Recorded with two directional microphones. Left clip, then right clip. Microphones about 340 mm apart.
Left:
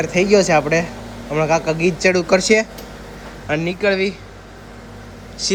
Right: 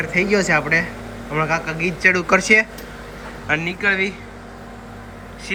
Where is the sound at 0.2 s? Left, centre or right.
Centre.